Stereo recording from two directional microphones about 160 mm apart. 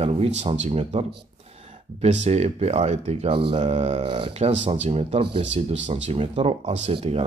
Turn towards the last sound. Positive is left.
turn(degrees=-35)  # may be behind; listen again after turning